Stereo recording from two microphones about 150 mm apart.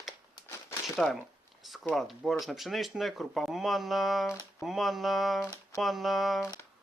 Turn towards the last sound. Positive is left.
turn(degrees=0)  # may be behind; listen again after turning